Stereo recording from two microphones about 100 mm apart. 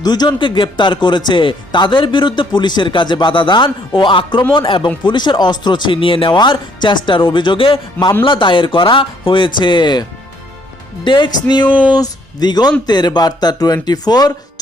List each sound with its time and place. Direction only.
0.0 s speech: 45° left (ahead or behind)